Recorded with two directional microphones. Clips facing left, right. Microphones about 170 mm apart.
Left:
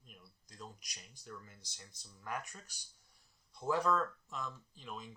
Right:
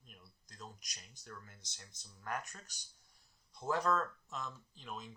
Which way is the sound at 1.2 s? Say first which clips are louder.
Left 2 dB; centre (ahead or behind).